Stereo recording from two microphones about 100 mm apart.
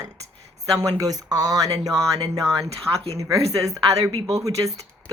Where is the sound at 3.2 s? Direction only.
35° right (ahead or behind).